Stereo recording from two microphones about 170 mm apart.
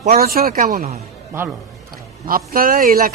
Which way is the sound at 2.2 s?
55° right (ahead or behind).